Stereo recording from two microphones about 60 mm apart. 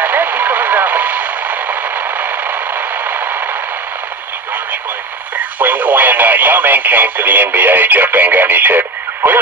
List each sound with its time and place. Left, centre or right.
0.0 s radio: right
5.6 s speech: right